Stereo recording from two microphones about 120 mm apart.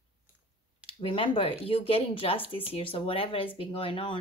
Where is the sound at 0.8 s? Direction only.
50° left (ahead or behind).